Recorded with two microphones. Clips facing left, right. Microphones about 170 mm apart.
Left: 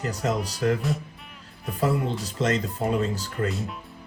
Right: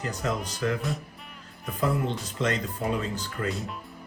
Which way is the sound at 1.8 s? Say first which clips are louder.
Left 2 dB; 35° left (ahead or behind).